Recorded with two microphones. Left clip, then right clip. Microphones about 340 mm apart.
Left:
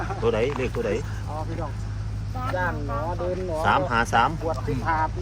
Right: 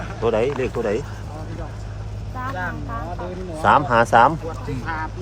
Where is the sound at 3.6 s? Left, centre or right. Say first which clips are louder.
Right 7 dB; right.